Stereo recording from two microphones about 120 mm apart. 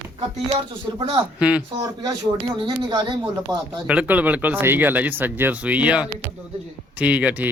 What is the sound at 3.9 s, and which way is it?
Speech, 10° right (ahead or behind).